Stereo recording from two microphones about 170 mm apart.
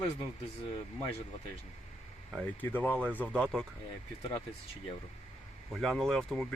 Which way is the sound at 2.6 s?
10° left (ahead or behind).